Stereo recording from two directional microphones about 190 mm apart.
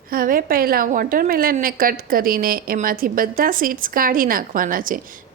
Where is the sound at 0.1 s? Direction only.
50° right (ahead or behind).